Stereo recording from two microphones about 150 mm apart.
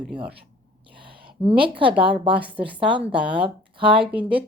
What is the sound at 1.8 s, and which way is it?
Speech, 35° right (ahead or behind).